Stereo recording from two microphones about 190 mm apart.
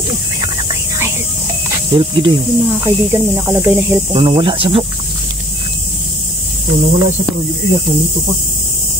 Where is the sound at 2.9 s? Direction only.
15° right (ahead or behind).